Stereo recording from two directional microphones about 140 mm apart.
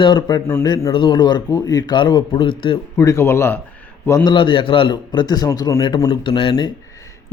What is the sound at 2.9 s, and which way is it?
Speech, 20° left (ahead or behind).